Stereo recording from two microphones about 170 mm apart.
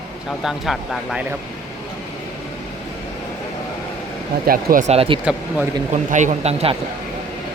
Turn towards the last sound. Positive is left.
turn(degrees=-40)  # may be behind; listen again after turning